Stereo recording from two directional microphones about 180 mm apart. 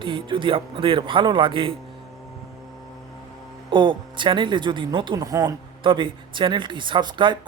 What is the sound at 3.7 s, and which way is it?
Speech, 25° right (ahead or behind).